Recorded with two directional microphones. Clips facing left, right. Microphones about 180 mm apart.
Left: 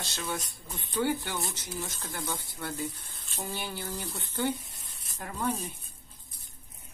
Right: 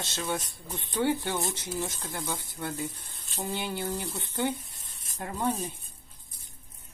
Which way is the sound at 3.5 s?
20° right (ahead or behind).